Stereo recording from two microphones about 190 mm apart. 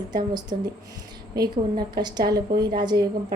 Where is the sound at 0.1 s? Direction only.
20° right (ahead or behind).